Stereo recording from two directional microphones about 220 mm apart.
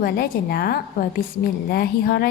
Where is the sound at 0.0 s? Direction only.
45° left (ahead or behind).